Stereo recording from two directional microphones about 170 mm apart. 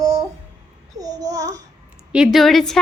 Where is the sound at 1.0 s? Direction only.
20° right (ahead or behind).